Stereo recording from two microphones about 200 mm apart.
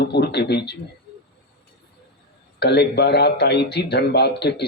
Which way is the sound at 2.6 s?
55° left (ahead or behind).